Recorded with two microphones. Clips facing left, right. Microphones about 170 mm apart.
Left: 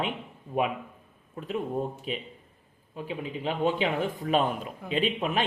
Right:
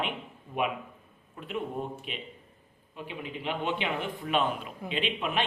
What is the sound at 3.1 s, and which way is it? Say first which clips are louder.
Speech: left 3 dB; 40° left (ahead or behind).